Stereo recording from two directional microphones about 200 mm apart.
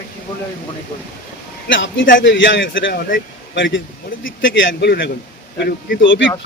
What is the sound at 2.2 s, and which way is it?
A man's voice, 65° left (ahead or behind).